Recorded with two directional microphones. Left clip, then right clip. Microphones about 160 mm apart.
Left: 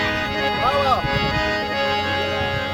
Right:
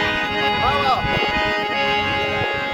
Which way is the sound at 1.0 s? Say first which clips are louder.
Right 2 dB; 10° left (ahead or behind).